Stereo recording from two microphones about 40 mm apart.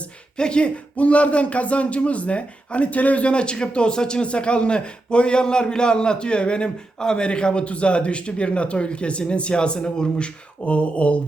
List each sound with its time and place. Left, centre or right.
0.3 s speech: left
10.7 s mantra: left